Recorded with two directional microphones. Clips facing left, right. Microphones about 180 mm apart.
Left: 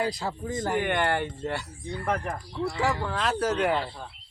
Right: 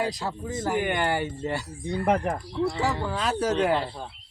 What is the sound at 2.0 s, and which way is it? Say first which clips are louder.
Speech: right 5 dB; 30° right (ahead or behind).